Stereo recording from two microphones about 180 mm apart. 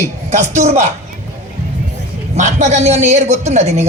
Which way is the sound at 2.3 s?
40° right (ahead or behind).